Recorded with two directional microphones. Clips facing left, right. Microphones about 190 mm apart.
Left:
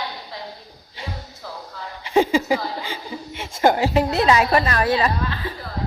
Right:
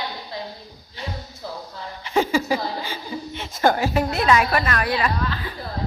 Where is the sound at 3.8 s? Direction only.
20° left (ahead or behind).